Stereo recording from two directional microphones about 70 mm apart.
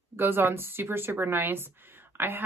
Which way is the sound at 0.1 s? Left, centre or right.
Right.